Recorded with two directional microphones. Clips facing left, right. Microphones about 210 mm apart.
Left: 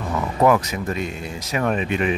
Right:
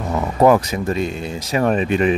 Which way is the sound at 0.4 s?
30° right (ahead or behind).